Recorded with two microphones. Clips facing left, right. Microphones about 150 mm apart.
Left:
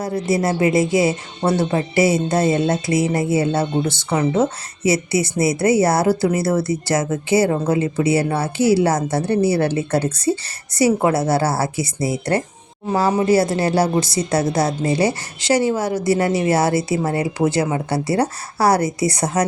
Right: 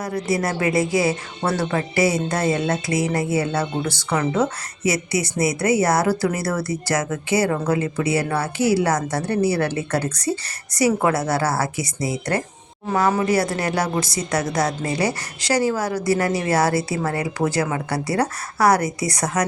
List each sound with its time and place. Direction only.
0.0 s a woman's voice: 25° left (ahead or behind)